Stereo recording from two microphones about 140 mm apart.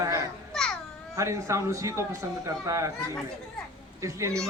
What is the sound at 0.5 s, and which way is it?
Babbling, 5° left (ahead or behind).